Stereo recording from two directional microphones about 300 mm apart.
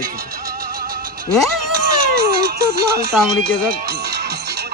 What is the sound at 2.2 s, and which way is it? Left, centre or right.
Speech, right.